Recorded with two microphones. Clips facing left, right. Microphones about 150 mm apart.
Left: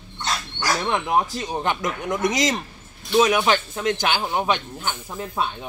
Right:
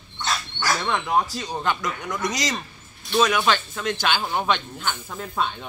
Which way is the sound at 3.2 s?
15° left (ahead or behind).